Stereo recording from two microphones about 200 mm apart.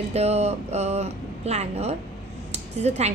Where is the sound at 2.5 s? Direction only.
35° right (ahead or behind).